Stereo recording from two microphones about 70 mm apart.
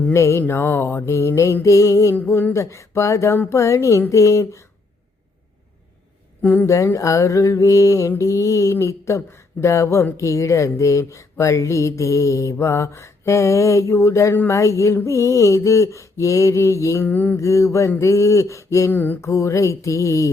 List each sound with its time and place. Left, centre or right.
0.1 s speech: left
0.4 s mantra: left
1.6 s speech: left
6.4 s speech: left
6.7 s speech: left
17.1 s a sound: left
17.3 s speech: left
18.9 s a sound: left
19.2 s speech: left